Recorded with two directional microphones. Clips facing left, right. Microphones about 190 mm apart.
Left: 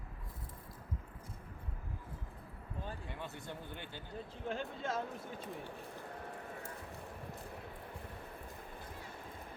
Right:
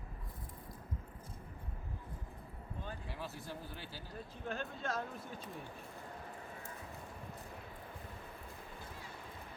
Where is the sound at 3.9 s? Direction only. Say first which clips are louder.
Left 2 dB; 20° left (ahead or behind).